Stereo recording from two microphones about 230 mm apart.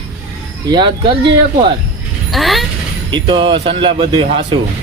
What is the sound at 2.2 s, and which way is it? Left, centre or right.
Vehicle, centre.